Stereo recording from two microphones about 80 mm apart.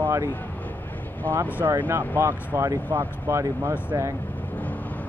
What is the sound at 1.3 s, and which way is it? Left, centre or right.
Speech, right.